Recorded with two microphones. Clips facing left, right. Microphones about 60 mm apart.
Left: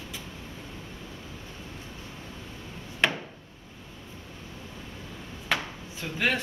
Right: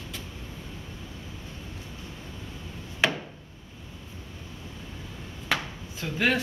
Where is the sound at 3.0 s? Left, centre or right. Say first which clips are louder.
Even; centre.